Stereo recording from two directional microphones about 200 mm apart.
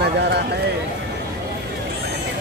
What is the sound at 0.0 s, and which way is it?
Clip-clop, 55° right (ahead or behind).